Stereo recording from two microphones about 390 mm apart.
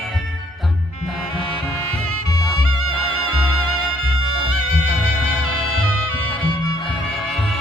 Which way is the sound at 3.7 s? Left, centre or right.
Right.